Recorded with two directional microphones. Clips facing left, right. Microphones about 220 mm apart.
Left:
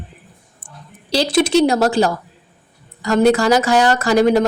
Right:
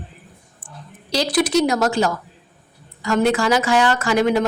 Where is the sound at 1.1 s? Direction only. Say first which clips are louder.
Left 3 dB; 30° left (ahead or behind).